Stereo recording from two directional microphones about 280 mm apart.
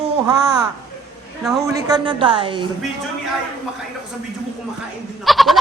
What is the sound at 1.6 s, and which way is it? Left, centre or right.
Speech, centre.